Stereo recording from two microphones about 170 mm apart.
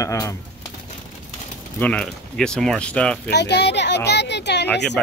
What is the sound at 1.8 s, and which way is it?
Speech, 5° left (ahead or behind).